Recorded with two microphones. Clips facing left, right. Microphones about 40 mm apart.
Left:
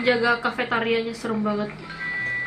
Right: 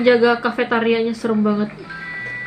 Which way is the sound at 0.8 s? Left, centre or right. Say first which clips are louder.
Right 6 dB; right.